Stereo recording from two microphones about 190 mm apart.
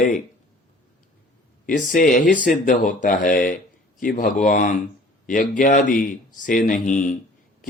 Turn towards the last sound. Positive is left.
turn(degrees=40)  # may be behind; listen again after turning